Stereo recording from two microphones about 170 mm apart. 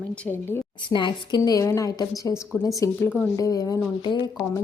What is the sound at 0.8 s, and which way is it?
A woman's voice, 25° left (ahead or behind).